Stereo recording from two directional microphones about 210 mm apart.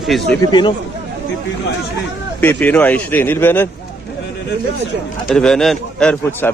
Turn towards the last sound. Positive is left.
turn(degrees=5)  # may be behind; listen again after turning